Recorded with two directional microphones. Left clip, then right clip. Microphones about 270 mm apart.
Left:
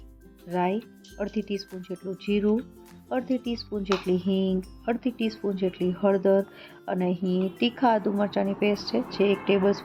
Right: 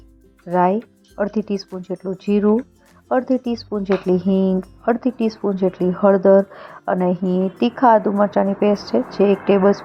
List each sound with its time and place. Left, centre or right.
0.4 s speech: centre